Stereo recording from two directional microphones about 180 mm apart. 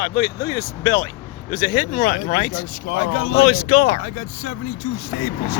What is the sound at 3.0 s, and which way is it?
Speech, 90° left.